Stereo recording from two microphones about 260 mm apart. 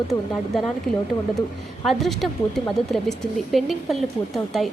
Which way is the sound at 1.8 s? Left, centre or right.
Centre.